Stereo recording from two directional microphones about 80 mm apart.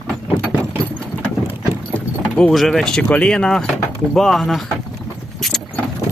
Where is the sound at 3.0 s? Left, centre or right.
Centre.